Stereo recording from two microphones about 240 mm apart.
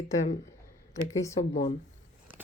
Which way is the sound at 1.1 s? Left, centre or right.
Centre.